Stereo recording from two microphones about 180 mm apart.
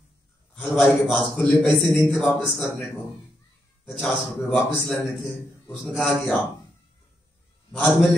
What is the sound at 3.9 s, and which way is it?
A man's voice, 5° left (ahead or behind).